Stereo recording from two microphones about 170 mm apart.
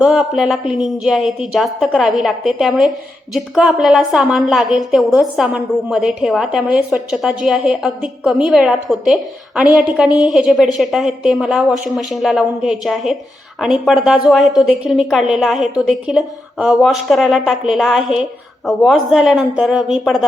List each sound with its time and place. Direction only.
0.0 s a woman's voice: 5° right (ahead or behind)